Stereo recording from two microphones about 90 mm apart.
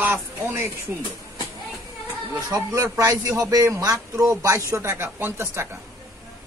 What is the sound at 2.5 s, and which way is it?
A man's voice, 40° right (ahead or behind).